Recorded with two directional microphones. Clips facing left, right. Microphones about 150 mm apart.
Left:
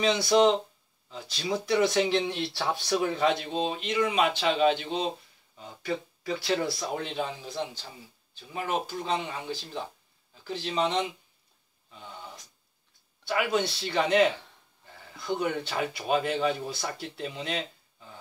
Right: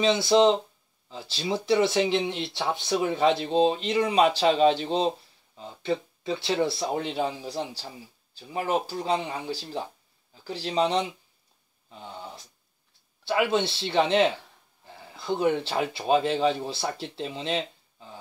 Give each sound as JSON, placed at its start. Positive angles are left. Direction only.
{"t": 0.0, "sound": "speech", "side_deg": -25}
{"t": 11.9, "sound": "a sound", "side_deg": -35}
{"t": 13.2, "sound": "speech", "side_deg": -25}